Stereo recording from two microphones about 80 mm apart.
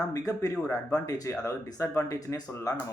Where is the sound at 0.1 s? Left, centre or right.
Left.